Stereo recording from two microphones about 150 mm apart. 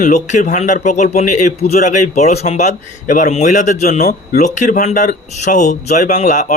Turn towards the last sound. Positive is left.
turn(degrees=55)  # may be behind; listen again after turning